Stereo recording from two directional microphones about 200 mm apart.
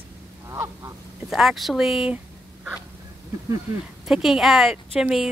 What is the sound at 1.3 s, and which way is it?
Speech, centre (ahead or behind).